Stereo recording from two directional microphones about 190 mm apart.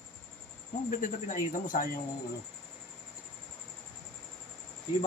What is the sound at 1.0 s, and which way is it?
Speech, 45° left (ahead or behind).